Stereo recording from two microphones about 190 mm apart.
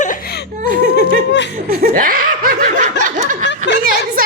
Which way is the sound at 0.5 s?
45° right (ahead or behind).